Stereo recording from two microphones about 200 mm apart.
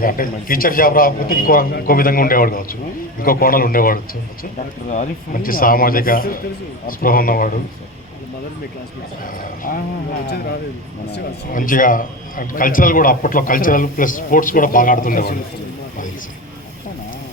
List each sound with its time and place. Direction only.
0.0 s a man's voice: 45° left (ahead or behind)
9.2 s a man's voice: 45° left (ahead or behind)